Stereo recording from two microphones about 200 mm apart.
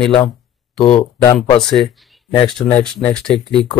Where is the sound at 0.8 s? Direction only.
30° left (ahead or behind).